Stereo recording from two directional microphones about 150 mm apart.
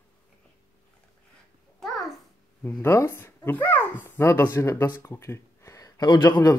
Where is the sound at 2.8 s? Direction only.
15° left (ahead or behind).